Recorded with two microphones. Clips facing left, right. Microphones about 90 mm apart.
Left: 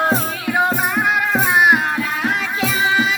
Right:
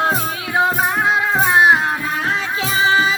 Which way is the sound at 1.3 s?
25° right (ahead or behind).